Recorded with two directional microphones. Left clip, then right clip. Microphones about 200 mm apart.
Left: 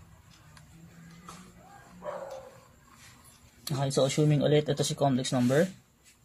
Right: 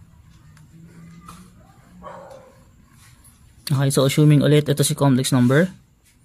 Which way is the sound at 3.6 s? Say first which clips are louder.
Right 7 dB; 30° right (ahead or behind).